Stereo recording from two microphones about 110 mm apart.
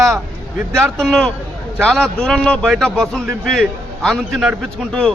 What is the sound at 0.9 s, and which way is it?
A man's voice, 5° left (ahead or behind).